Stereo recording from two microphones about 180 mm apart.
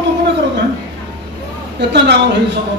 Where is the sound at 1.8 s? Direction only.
75° right (ahead or behind).